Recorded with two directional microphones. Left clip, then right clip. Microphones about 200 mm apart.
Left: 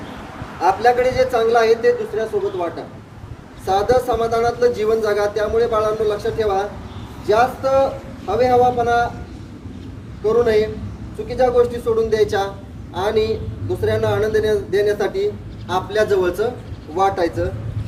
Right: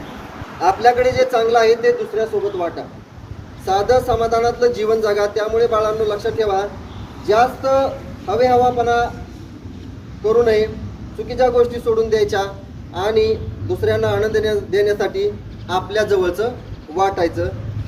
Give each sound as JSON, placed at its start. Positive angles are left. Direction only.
{"t": 0.6, "sound": "a woman's voice", "side_deg": -15}
{"t": 10.2, "sound": "a woman's voice", "side_deg": -15}